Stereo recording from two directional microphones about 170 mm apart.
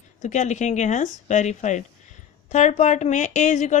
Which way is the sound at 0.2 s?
45° left (ahead or behind).